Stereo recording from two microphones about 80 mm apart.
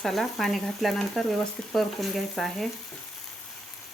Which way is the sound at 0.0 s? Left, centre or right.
Centre.